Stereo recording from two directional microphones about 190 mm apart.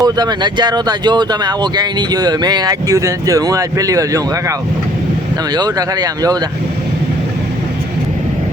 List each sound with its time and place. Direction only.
0.0 s speech: 20° right (ahead or behind)
5.5 s speech: 20° right (ahead or behind)